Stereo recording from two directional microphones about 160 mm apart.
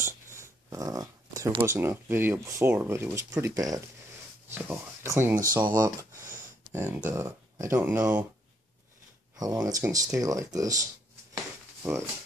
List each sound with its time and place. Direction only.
0.0 s speech: 15° right (ahead or behind)
9.4 s speech: 20° right (ahead or behind)
11.8 s speech: 15° right (ahead or behind)